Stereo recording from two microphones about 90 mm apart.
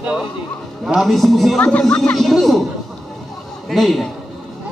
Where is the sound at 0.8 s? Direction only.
5° right (ahead or behind).